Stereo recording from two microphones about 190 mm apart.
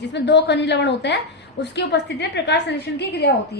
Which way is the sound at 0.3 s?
65° left (ahead or behind).